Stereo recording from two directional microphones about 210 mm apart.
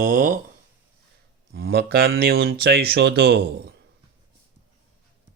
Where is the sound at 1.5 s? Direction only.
50° right (ahead or behind).